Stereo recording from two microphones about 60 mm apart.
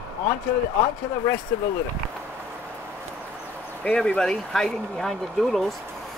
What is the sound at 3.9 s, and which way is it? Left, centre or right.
Speech, centre.